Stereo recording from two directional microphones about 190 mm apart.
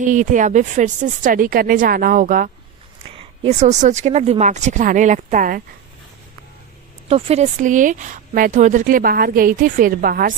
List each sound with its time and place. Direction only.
0.0 s speech: 40° right (ahead or behind)
7.1 s speech: 30° right (ahead or behind); by 10.3 s 50° right (ahead or behind)